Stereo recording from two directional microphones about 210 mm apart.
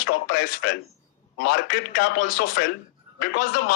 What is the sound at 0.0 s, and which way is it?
A man's voice, 55° left (ahead or behind).